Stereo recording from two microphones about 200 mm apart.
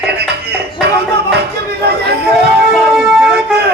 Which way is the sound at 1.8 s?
55° right (ahead or behind).